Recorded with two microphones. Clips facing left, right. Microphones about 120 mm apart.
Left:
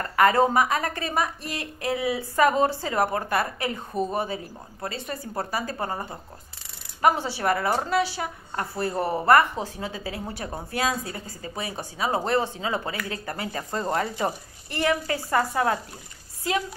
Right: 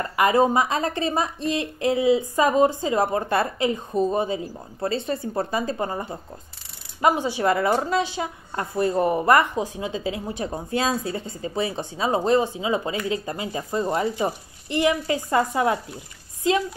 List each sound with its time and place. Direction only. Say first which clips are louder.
0.0 s a woman's voice: right 1 dB; 20° right (ahead or behind)